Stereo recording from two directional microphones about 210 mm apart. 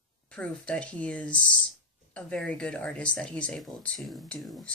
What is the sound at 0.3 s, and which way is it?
A woman's voice, 5° left (ahead or behind).